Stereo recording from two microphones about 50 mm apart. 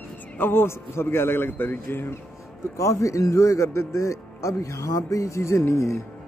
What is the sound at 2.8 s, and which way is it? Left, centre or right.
Speech, left.